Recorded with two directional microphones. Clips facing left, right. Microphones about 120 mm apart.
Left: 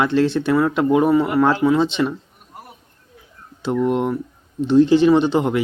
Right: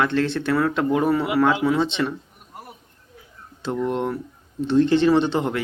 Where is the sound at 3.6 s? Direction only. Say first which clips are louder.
Left 5 dB; 15° left (ahead or behind).